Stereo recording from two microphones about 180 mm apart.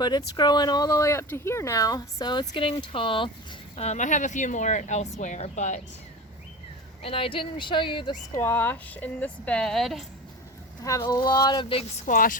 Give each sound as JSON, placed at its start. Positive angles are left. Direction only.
{"t": 0.0, "sound": "speech", "side_deg": 25}
{"t": 3.8, "sound": "speech", "side_deg": 40}
{"t": 7.0, "sound": "speech", "side_deg": 30}
{"t": 8.4, "sound": "a woman's voice", "side_deg": 10}
{"t": 10.8, "sound": "speech", "side_deg": 20}
{"t": 12.0, "sound": "speech", "side_deg": 50}